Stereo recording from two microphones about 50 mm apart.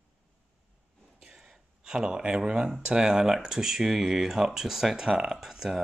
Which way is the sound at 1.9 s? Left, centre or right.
Centre.